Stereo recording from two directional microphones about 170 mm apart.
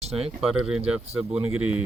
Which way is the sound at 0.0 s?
35° right (ahead or behind).